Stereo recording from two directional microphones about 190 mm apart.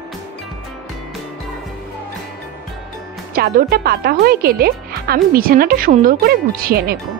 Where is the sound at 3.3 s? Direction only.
50° right (ahead or behind).